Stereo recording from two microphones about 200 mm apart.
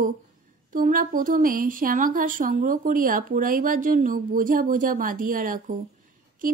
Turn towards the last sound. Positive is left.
turn(degrees=-45)  # may be behind; listen again after turning